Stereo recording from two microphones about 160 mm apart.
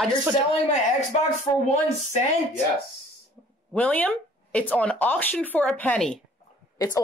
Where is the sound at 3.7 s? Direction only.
10° left (ahead or behind).